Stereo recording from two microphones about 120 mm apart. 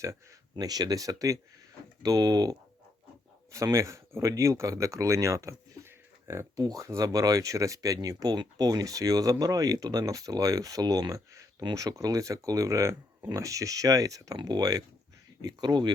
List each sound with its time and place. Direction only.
0.0 s speech: 25° right (ahead or behind)